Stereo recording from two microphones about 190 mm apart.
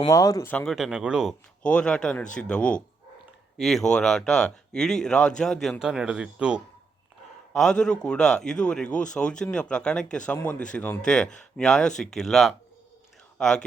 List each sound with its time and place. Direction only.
0.0 s speech: 15° left (ahead or behind)
0.5 s speech: centre (ahead or behind)